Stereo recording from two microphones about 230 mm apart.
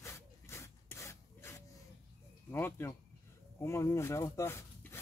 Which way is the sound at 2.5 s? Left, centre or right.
Centre.